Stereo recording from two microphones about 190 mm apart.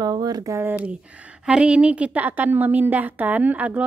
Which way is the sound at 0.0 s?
20° right (ahead or behind).